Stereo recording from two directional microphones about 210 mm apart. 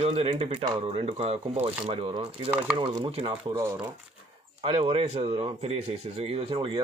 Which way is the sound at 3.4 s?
15° right (ahead or behind).